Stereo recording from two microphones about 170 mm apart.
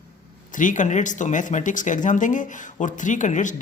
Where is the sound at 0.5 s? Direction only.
50° left (ahead or behind).